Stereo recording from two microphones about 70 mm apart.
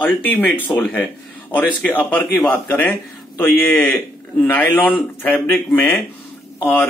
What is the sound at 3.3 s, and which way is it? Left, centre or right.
A man's voice, left.